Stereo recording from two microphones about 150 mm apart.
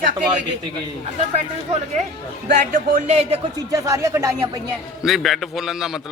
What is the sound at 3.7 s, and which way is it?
Speech, 20° right (ahead or behind).